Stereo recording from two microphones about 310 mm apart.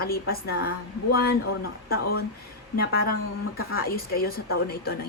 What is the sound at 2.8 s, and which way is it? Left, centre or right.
Speech, left.